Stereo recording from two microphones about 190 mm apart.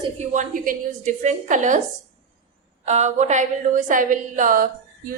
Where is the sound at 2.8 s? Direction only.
35° right (ahead or behind).